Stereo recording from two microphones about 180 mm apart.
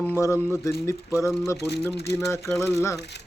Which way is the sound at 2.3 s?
15° left (ahead or behind).